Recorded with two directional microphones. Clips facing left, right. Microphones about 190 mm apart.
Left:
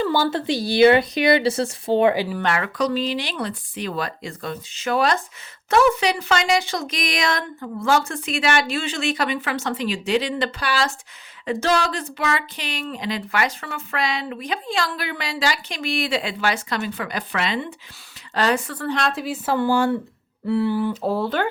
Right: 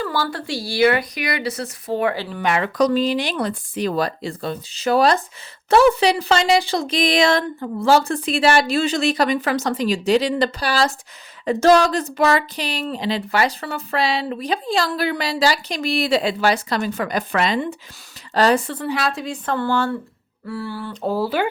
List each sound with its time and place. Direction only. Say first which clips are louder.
0.0 s a woman's voice: left 4 dB; 20° left (ahead or behind)
2.7 s speech: right 5 dB; 45° right (ahead or behind)
18.9 s a woman's voice: left 1 dB; 5° right (ahead or behind); by 20.9 s 20° left (ahead or behind)
20.9 s a woman's voice: right 1 dB; centre (ahead or behind)